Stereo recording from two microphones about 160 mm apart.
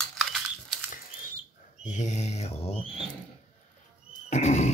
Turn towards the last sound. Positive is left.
turn(degrees=45)  # may be behind; listen again after turning